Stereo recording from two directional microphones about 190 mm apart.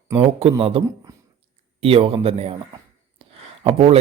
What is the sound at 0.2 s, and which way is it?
Speech, 30° right (ahead or behind).